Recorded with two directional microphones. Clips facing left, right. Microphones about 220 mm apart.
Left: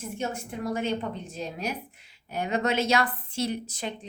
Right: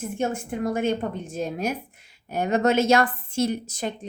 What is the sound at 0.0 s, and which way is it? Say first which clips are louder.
Speech: right 6 dB; 50° right (ahead or behind).